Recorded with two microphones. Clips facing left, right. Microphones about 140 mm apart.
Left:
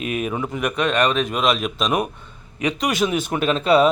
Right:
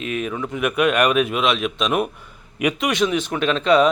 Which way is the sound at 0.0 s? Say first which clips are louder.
Left 1 dB; 10° left (ahead or behind).